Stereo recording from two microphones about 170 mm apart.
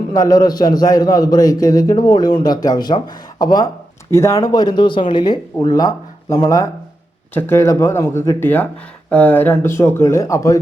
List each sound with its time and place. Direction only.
0.1 s a man's voice: 20° left (ahead or behind)